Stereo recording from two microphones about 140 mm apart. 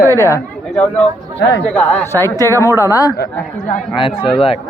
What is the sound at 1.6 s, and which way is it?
Speech, 10° left (ahead or behind).